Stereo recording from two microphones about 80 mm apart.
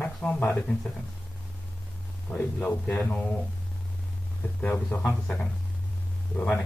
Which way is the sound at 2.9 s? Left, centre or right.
Centre.